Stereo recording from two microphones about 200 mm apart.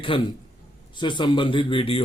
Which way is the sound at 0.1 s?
25° left (ahead or behind).